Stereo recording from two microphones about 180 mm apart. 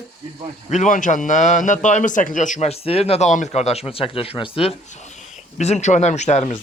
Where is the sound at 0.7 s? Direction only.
45° left (ahead or behind).